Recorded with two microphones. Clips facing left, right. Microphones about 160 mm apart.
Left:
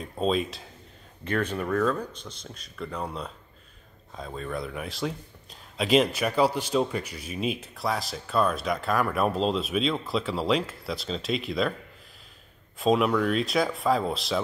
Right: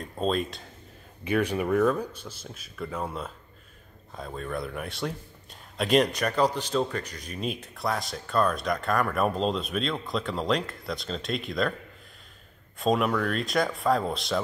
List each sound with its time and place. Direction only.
0.0 s a man's voice: centre (ahead or behind)
1.2 s a man's voice: 10° right (ahead or behind)
12.7 s a man's voice: centre (ahead or behind)